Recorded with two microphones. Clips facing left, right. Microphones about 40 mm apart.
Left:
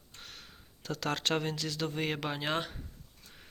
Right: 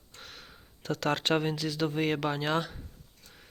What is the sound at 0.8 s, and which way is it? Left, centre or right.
Speech, right.